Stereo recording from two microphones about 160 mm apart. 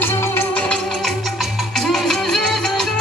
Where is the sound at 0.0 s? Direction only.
15° left (ahead or behind).